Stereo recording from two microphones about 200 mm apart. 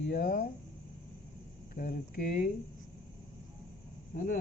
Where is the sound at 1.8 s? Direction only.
50° left (ahead or behind).